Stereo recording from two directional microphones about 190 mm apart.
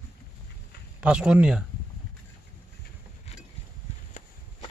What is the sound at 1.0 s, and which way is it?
Speech, 5° right (ahead or behind).